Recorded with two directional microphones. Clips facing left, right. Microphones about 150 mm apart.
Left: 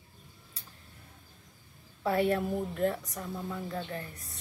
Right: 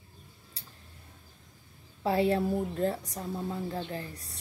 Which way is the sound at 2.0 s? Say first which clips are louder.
Right 1 dB; 30° right (ahead or behind).